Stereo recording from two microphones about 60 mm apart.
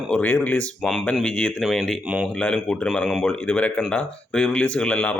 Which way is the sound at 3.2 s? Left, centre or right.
Left.